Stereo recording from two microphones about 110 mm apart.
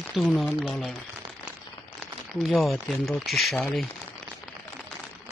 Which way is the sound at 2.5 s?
Centre (ahead or behind).